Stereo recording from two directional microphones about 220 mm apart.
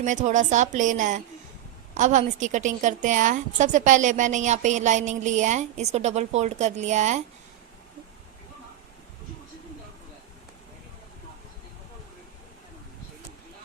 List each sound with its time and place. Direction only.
0.0 s a woman's voice: 35° right (ahead or behind)